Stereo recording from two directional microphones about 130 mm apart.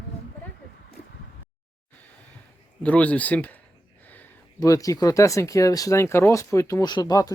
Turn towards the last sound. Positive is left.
turn(degrees=30)  # may be behind; listen again after turning